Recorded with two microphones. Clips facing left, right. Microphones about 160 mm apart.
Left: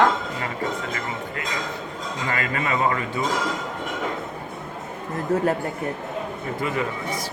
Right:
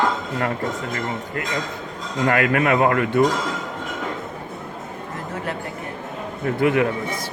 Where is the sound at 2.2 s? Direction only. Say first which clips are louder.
Right 9 dB; 60° right (ahead or behind).